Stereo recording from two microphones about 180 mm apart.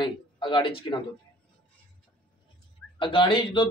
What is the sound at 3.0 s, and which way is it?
Speech, 30° left (ahead or behind).